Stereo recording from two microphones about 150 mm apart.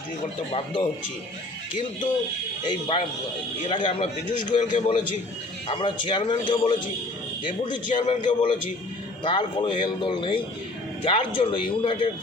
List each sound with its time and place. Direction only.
0.5 s a man's voice: 40° left (ahead or behind)
2.6 s a man's voice: 35° left (ahead or behind)
8.0 s a man's voice: 40° left (ahead or behind)